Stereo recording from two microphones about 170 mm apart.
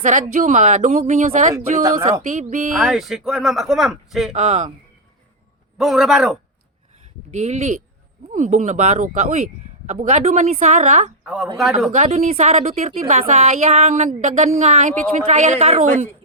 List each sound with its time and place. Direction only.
0.0 s speech: 45° right (ahead or behind)
1.8 s speech: 20° right (ahead or behind)
2.2 s speech: 45° right (ahead or behind)
2.7 s speech: centre (ahead or behind)
4.3 s a woman's voice: 40° right (ahead or behind)
5.7 s speech: centre (ahead or behind)
7.3 s a woman's voice: 40° right (ahead or behind)
11.2 s speech: 5° right (ahead or behind)
11.9 s a woman's voice: 40° right (ahead or behind)